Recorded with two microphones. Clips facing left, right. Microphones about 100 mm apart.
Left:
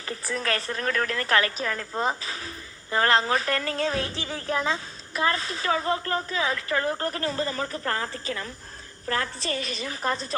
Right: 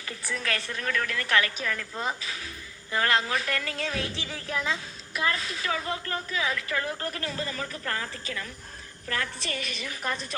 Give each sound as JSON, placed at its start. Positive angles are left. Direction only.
{"t": 0.0, "sound": "a woman's voice", "side_deg": 35}